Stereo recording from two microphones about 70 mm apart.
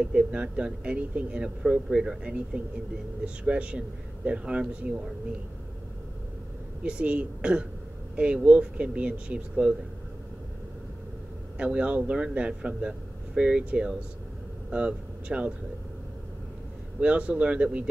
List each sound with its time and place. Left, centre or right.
0.0 s speech: centre
6.8 s speech: centre
11.5 s speech: centre
17.0 s speech: centre